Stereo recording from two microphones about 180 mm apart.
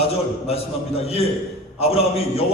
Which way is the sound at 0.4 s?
35° left (ahead or behind).